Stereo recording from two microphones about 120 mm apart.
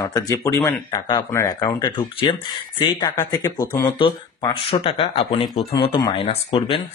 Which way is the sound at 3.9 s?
45° left (ahead or behind).